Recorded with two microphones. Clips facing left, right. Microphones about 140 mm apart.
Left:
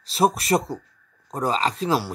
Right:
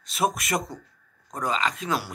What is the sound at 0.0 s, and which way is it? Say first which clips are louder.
Speech: left 5 dB; 30° left (ahead or behind).